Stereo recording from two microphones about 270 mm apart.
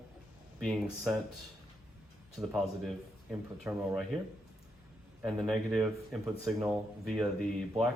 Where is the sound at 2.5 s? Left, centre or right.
Centre.